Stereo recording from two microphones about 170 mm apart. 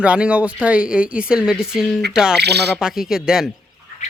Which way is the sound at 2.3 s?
75° right (ahead or behind).